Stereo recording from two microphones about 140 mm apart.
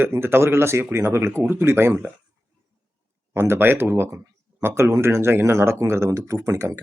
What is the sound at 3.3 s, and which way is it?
Speech, 15° right (ahead or behind).